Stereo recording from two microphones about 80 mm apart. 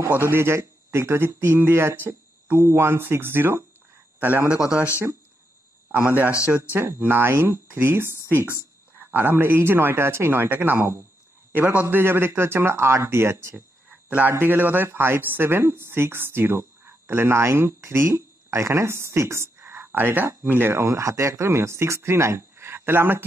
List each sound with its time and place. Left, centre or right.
0.0 s speech: right
5.9 s speech: right
11.9 s speech: right
13.8 s a sound: centre
14.4 s speech: right
19.6 s speech: right